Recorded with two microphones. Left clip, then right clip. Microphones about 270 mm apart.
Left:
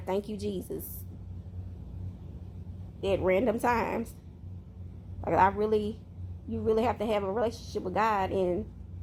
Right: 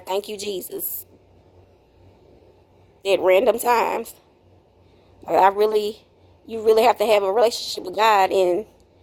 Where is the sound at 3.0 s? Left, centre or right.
Right.